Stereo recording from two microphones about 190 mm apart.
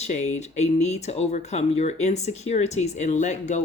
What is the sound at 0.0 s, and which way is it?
Speech, 35° left (ahead or behind).